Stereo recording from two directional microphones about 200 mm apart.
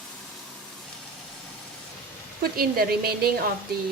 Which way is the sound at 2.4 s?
50° right (ahead or behind).